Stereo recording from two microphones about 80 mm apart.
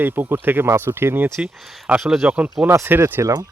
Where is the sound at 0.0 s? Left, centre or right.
Right.